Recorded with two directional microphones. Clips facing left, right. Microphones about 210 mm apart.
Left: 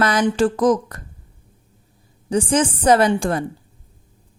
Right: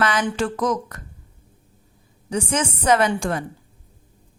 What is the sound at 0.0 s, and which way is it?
Speech, 40° left (ahead or behind).